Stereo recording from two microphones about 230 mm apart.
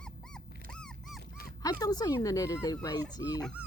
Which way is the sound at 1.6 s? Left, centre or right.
Centre.